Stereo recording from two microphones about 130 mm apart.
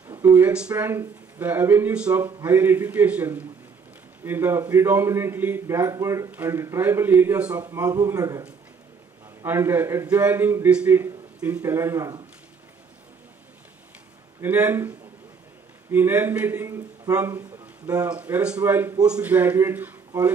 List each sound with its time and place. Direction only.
0.2 s a man's voice: 15° right (ahead or behind)
7.6 s a man's voice: 25° right (ahead or behind)
14.4 s a man's voice: 15° right (ahead or behind)
18.0 s a man's voice: 10° right (ahead or behind)